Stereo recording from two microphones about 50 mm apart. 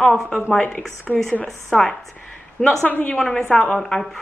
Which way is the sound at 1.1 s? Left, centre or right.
Left.